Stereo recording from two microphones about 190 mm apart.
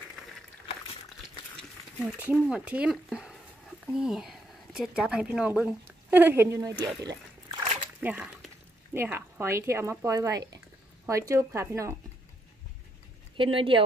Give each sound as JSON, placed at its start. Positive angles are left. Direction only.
{"t": 2.0, "sound": "speech", "side_deg": -10}
{"t": 7.1, "sound": "a sound", "side_deg": -25}
{"t": 8.0, "sound": "speech", "side_deg": -5}
{"t": 13.4, "sound": "speech", "side_deg": -25}